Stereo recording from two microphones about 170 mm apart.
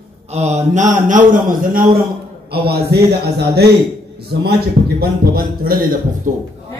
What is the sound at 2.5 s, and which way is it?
A man's voice, 70° right (ahead or behind).